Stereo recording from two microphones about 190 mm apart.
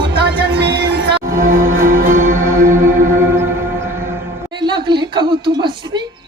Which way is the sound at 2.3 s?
15° right (ahead or behind).